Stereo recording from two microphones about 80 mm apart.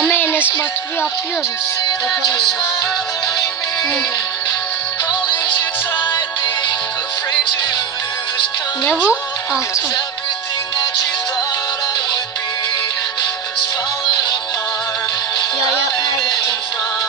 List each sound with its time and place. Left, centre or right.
0.1 s music: left
8.9 s speech: centre